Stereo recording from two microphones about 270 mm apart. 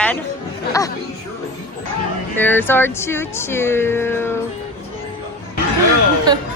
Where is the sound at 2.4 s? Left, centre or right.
Centre.